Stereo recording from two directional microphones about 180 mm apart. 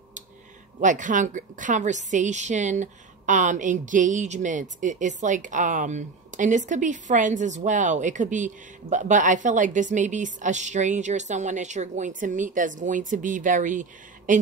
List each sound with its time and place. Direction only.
0.7 s a woman's voice: 45° right (ahead or behind)